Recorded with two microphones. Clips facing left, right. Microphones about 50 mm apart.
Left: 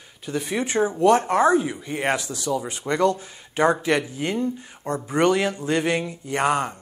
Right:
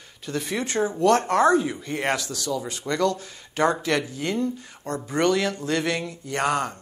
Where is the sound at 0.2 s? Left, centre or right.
Centre.